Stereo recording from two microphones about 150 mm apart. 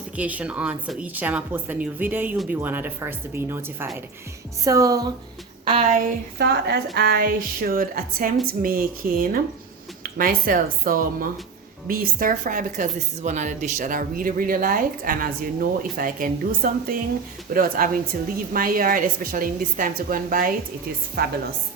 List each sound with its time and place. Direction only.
0.2 s speech: 10° right (ahead or behind)
5.6 s speech: 45° right (ahead or behind)
6.0 s a woman's voice: 90° right; by 20.5 s 70° right (ahead or behind)
21.2 s a woman's voice: 90° right